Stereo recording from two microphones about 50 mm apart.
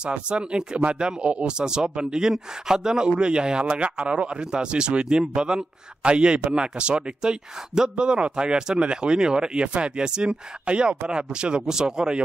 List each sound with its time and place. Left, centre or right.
0.0 s speech: right